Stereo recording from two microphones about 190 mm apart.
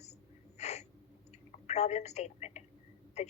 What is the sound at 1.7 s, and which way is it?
A woman's voice, 35° left (ahead or behind).